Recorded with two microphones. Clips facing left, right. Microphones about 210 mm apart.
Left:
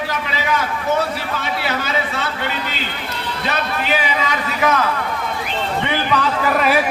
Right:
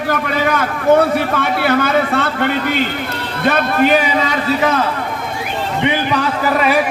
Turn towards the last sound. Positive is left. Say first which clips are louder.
# right 3 dB
turn(degrees=-10)  # may be behind; listen again after turning